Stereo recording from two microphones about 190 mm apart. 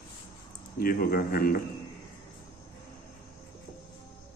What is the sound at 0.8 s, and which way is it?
Speech, 50° left (ahead or behind).